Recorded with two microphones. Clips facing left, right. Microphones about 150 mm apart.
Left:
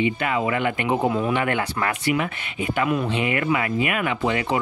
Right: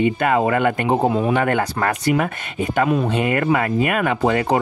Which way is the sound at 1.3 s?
40° right (ahead or behind).